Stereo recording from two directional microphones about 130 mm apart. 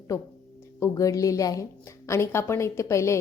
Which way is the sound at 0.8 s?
25° left (ahead or behind).